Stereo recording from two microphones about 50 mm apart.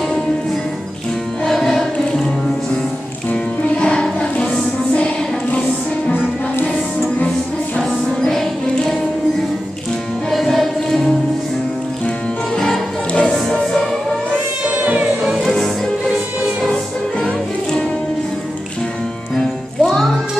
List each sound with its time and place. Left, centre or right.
1.4 s music: centre
3.7 s music: centre
7.8 s music: centre
10.3 s music: centre
13.2 s music: centre
14.3 s cat: right
14.9 s music: right
15.3 s music: centre
19.3 s music: centre